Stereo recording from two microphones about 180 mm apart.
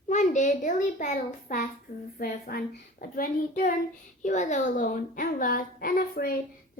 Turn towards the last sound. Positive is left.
turn(degrees=55)  # may be behind; listen again after turning